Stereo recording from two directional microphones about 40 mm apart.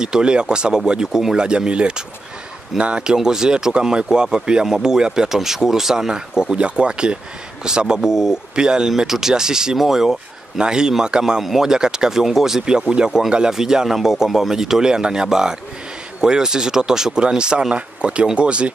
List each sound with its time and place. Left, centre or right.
0.0 s speech: right
4.6 s speech: centre
10.6 s speech: centre
11.4 s speech: centre
11.7 s speech: centre